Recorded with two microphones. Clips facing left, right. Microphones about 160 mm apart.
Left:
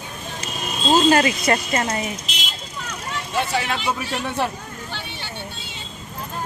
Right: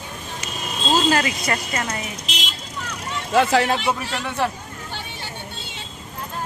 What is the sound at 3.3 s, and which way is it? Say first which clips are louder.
Speech: right 7 dB; 90° right.